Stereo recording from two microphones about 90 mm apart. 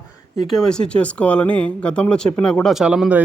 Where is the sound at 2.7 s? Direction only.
5° right (ahead or behind).